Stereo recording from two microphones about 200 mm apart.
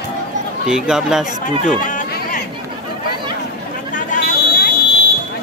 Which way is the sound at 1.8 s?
40° left (ahead or behind).